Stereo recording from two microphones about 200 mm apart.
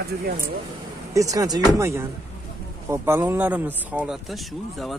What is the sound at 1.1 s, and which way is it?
Speech, 15° right (ahead or behind).